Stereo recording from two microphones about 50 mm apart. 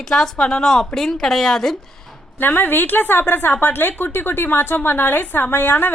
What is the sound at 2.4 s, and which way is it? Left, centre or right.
A woman's voice, left.